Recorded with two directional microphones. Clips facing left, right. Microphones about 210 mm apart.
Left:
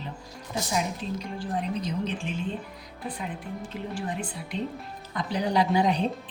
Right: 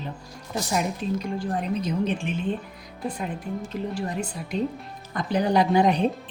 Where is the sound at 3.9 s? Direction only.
40° right (ahead or behind).